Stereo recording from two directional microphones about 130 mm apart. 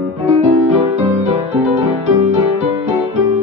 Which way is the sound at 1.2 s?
65° right (ahead or behind).